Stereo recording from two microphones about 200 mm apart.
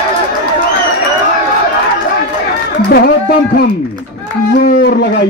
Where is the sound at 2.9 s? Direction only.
50° left (ahead or behind).